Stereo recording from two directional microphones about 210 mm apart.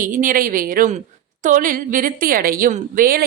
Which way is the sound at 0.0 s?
40° right (ahead or behind).